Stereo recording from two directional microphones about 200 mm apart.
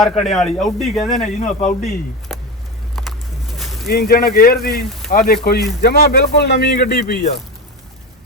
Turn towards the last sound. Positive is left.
turn(degrees=50)  # may be behind; listen again after turning